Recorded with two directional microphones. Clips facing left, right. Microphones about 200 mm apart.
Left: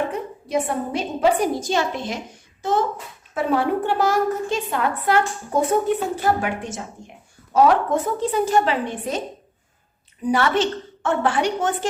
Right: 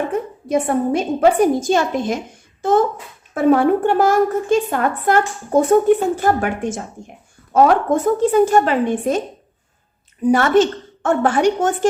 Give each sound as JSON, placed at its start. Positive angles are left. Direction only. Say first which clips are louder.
{"t": 0.1, "sound": "a woman's voice", "louder": "right 5 dB", "side_deg": -50}
{"t": 10.2, "sound": "a woman's voice", "louder": "right 6 dB", "side_deg": -45}